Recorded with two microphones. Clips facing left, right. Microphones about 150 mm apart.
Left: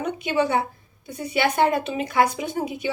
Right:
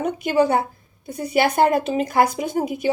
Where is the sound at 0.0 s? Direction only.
45° right (ahead or behind).